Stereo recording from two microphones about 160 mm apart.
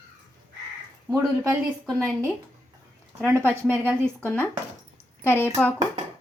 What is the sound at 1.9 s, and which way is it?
Speech, 5° left (ahead or behind).